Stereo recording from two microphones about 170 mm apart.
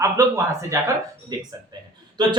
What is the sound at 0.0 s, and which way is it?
Speech, 20° right (ahead or behind).